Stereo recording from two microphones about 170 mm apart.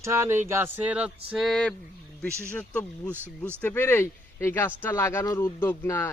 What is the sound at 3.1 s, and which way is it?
Speech, 10° right (ahead or behind).